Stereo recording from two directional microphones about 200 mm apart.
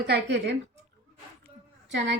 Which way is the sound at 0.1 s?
60° right (ahead or behind).